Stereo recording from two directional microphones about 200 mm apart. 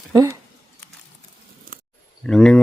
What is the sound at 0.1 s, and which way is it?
Speech, 15° right (ahead or behind).